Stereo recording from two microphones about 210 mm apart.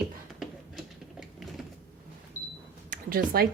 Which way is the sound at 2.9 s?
45° right (ahead or behind).